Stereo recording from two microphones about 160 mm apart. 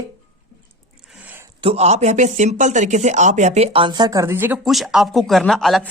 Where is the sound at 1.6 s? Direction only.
40° right (ahead or behind).